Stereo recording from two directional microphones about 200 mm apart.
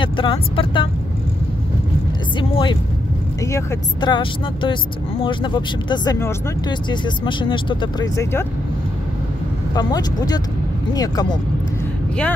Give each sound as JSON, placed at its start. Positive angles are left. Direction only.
{"t": 0.0, "sound": "speech", "side_deg": 25}
{"t": 2.3, "sound": "speech", "side_deg": 25}
{"t": 9.8, "sound": "speech", "side_deg": 20}